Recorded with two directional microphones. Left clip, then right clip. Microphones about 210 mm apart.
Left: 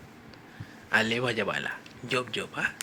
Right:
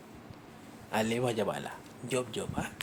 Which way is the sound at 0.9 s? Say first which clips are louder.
Left 5 dB; 5° right (ahead or behind).